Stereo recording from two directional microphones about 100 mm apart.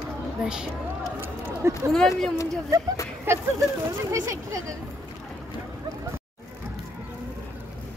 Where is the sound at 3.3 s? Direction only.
25° right (ahead or behind).